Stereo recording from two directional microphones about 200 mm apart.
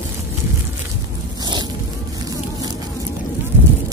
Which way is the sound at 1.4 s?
20° right (ahead or behind).